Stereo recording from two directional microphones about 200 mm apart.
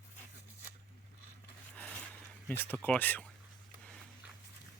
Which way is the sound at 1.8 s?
5° left (ahead or behind).